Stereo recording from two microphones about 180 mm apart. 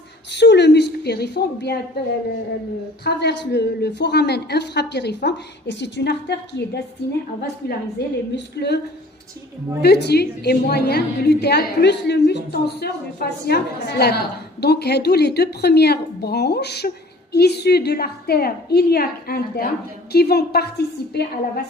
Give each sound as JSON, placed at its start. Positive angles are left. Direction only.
{"t": 0.3, "sound": "a woman's voice", "side_deg": 70}
{"t": 3.0, "sound": "a woman's voice", "side_deg": 70}
{"t": 9.8, "sound": "a woman's voice", "side_deg": 65}